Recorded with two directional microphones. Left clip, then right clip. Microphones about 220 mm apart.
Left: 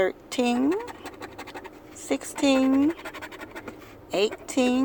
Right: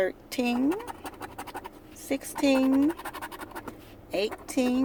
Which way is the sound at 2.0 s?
15° left (ahead or behind).